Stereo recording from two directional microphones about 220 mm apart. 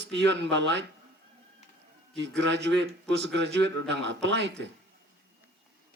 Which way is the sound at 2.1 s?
55° right (ahead or behind).